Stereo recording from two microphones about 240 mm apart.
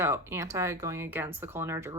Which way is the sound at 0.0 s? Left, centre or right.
Centre.